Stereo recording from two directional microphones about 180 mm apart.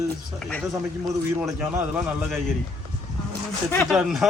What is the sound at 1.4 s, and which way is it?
Speech, 10° right (ahead or behind).